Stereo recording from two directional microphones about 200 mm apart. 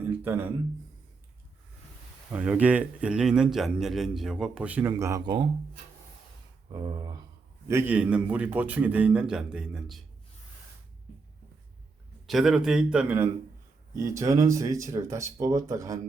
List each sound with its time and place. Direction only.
0.0 s a sound: 10° right (ahead or behind)
2.3 s a man's voice: 5° right (ahead or behind); by 5.5 s 20° right (ahead or behind)
6.7 s a man's voice: 20° right (ahead or behind); by 10.0 s centre (ahead or behind)
12.2 s a man's voice: centre (ahead or behind); by 16.0 s 15° right (ahead or behind)